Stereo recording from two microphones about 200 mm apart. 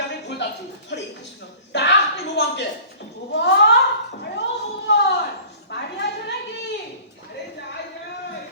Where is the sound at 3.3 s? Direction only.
60° left (ahead or behind).